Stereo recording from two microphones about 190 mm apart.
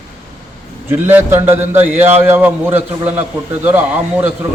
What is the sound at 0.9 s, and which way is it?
A man's voice, 10° right (ahead or behind).